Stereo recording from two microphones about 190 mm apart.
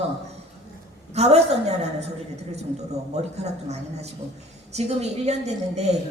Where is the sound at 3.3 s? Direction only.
35° right (ahead or behind).